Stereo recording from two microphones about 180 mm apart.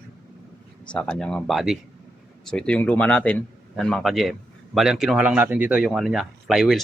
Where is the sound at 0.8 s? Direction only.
5° left (ahead or behind).